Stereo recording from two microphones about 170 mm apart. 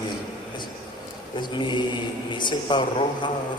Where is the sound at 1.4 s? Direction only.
25° left (ahead or behind).